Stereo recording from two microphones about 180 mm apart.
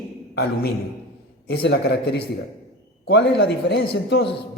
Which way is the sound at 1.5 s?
60° left (ahead or behind).